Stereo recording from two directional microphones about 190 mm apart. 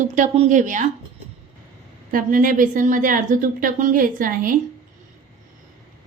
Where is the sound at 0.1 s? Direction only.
40° right (ahead or behind).